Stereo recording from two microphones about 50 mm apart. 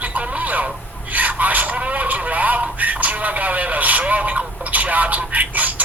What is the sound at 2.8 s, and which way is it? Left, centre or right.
Radio, right.